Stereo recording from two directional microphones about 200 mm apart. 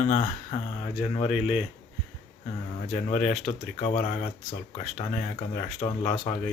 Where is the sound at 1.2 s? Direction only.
5° right (ahead or behind).